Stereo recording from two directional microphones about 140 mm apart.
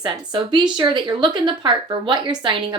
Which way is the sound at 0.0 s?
35° right (ahead or behind).